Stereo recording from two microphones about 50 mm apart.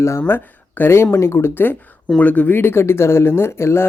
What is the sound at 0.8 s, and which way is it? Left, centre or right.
Speech, left.